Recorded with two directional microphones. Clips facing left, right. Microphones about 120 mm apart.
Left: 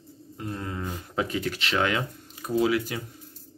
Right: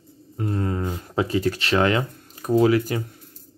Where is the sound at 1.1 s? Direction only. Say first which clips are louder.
Right 6 dB; 35° right (ahead or behind).